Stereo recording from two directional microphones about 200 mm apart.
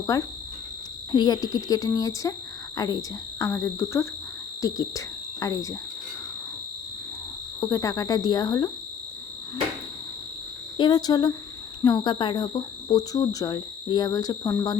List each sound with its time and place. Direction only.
0.1 s speech: 15° left (ahead or behind)
7.6 s speech: 15° left (ahead or behind)
10.8 s speech: 20° left (ahead or behind)